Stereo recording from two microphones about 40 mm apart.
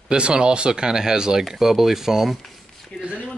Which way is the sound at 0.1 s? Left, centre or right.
Right.